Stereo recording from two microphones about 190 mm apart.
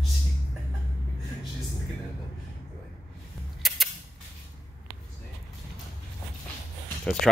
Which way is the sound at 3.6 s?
Centre (ahead or behind).